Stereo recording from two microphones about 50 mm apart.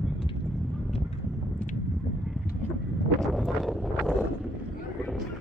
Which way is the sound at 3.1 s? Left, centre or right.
Centre.